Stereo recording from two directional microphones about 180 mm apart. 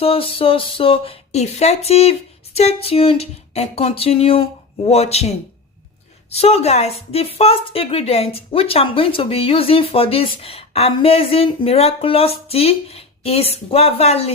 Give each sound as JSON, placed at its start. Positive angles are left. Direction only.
{"t": 0.0, "sound": "a woman's voice", "side_deg": 30}
{"t": 6.3, "sound": "a woman's voice", "side_deg": 35}